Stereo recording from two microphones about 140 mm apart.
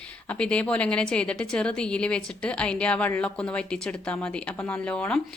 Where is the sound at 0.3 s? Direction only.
5° left (ahead or behind).